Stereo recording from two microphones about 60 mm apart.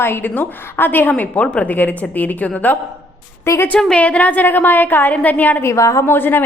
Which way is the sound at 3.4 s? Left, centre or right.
Left.